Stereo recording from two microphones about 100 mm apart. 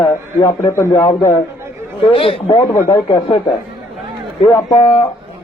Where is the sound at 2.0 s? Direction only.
65° left (ahead or behind).